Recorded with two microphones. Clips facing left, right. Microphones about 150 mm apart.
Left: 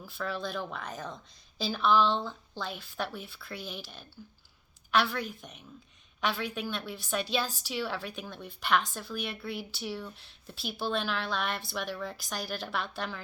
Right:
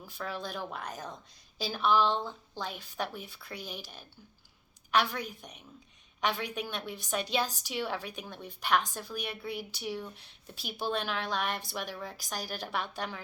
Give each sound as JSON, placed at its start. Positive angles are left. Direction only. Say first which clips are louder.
{"t": 0.2, "sound": "a woman's voice", "louder": "left 3 dB", "side_deg": -15}
{"t": 6.2, "sound": "a woman's voice", "louder": "even", "side_deg": -15}